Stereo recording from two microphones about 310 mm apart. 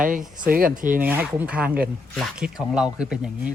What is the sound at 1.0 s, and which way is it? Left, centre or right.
Speech, centre.